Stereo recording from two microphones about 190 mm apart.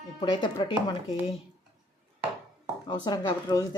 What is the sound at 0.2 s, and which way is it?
Speech, 25° left (ahead or behind).